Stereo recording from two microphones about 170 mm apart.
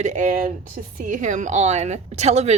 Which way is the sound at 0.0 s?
45° right (ahead or behind).